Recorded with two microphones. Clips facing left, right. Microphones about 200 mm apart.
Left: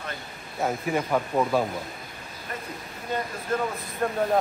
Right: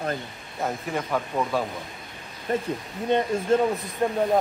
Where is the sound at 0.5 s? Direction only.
5° left (ahead or behind).